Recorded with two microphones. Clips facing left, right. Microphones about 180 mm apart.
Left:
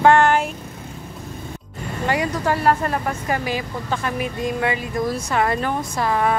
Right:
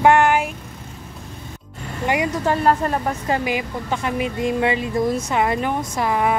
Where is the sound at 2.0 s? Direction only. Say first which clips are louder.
Right 1 dB; 20° right (ahead or behind).